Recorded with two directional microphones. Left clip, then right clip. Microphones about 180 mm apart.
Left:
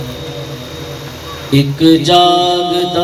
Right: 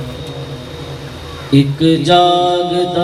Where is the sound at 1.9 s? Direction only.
50° left (ahead or behind).